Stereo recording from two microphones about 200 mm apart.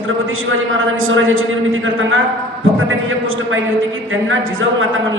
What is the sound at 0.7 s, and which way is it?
A man's voice, 80° right.